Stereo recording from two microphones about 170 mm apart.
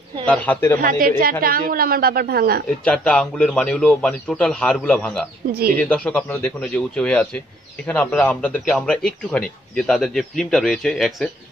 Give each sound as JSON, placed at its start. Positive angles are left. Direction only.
{"t": 0.3, "sound": "a man's voice", "side_deg": 10}
{"t": 0.7, "sound": "a woman's voice", "side_deg": -55}
{"t": 2.8, "sound": "a man's voice", "side_deg": 5}